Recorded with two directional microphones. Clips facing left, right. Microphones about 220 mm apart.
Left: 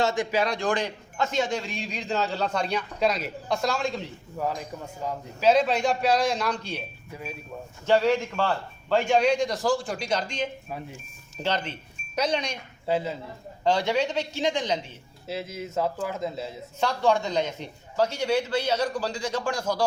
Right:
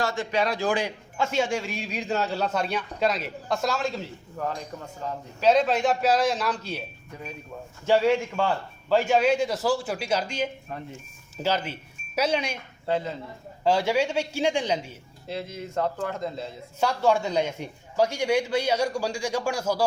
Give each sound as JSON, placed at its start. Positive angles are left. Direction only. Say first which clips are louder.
{"t": 0.0, "sound": "a man's voice", "louder": "left 3 dB", "side_deg": 20}
{"t": 0.3, "sound": "a man's voice", "louder": "even", "side_deg": 0}
{"t": 4.4, "sound": "a man's voice", "louder": "left 1 dB", "side_deg": 10}
{"t": 7.1, "sound": "speech", "louder": "left 3 dB", "side_deg": 5}
{"t": 7.9, "sound": "a man's voice", "louder": "right 1 dB", "side_deg": -10}
{"t": 12.8, "sound": "speech", "louder": "left 1 dB", "side_deg": 5}
{"t": 13.7, "sound": "a man's voice", "louder": "right 1 dB", "side_deg": -10}
{"t": 15.3, "sound": "a man's voice", "louder": "even", "side_deg": 5}
{"t": 16.8, "sound": "a man's voice", "louder": "right 1 dB", "side_deg": -10}